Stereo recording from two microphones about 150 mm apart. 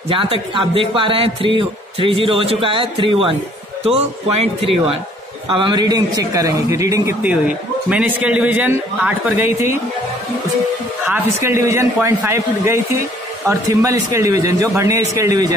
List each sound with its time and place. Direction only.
0.1 s a man's voice: 35° right (ahead or behind); by 7.2 s 20° right (ahead or behind)
7.9 s a man's voice: 10° right (ahead or behind)
11.1 s a man's voice: 15° right (ahead or behind)